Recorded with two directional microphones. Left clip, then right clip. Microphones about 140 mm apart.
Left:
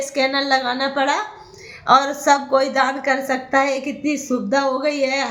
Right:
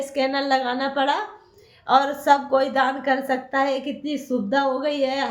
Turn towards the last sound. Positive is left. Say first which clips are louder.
# left 3 dB
turn(degrees=-10)  # may be behind; listen again after turning